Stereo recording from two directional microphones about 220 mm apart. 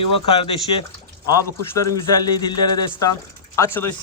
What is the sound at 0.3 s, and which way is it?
Speech, 25° left (ahead or behind).